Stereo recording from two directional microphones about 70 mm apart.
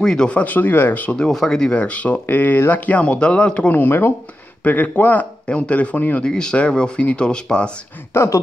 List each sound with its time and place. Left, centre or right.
0.0 s speech: centre
1.3 s speech: centre; by 6.2 s left
6.2 s speech: centre
8.1 s speech: left